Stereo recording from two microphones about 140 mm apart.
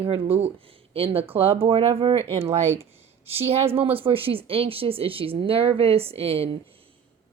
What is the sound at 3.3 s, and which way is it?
A woman's voice, 45° right (ahead or behind).